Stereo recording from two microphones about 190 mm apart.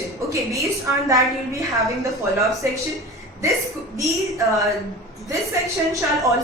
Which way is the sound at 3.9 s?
15° right (ahead or behind).